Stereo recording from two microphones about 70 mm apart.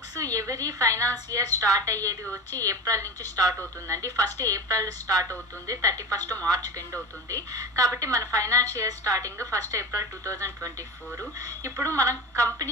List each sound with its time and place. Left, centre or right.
0.1 s a woman's voice: right
7.5 s a woman's voice: right